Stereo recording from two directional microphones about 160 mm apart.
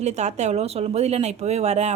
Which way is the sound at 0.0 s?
45° right (ahead or behind).